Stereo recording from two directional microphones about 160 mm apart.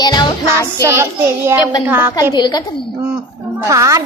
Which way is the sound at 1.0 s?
15° right (ahead or behind).